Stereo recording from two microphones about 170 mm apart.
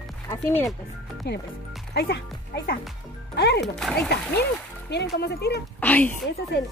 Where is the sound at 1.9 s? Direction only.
70° left (ahead or behind).